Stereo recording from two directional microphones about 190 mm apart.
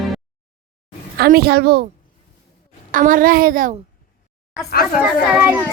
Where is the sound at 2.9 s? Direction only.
45° right (ahead or behind).